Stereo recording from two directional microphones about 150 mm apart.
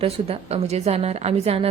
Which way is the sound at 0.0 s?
40° right (ahead or behind).